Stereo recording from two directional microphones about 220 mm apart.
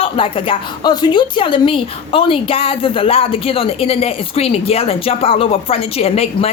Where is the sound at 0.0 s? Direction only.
25° left (ahead or behind).